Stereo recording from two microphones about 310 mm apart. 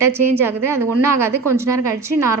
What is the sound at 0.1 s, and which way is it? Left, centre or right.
A woman's voice, centre.